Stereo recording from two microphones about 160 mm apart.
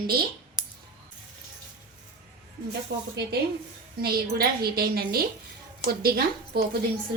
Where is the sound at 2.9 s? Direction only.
90° right.